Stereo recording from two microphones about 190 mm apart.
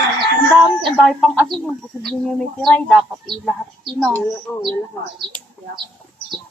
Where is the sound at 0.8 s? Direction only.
Centre (ahead or behind).